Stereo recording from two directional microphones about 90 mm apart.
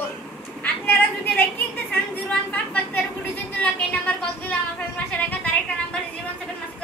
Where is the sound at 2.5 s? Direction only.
20° left (ahead or behind).